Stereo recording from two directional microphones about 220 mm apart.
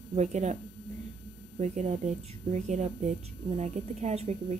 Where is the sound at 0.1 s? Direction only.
30° right (ahead or behind).